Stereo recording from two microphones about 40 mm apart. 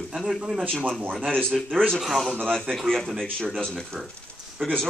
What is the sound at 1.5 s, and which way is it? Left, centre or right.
A man's voice, centre.